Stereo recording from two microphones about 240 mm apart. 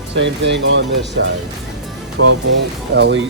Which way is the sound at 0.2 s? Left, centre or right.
Right.